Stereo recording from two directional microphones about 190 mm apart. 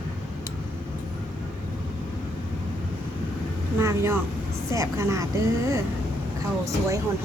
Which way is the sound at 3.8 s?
15° right (ahead or behind).